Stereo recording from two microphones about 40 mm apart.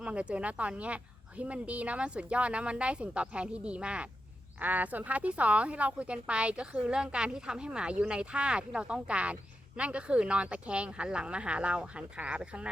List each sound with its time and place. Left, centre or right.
0.0 s speech: right
4.6 s speech: right